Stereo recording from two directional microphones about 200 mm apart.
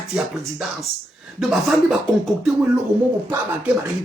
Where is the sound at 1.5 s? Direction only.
Centre (ahead or behind).